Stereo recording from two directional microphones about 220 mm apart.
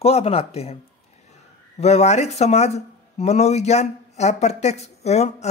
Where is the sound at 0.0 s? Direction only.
25° left (ahead or behind).